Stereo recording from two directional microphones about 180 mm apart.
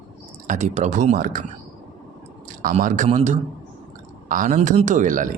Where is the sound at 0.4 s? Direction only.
45° right (ahead or behind).